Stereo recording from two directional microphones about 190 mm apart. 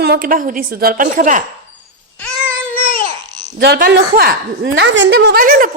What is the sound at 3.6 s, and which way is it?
A woman's voice, 55° right (ahead or behind).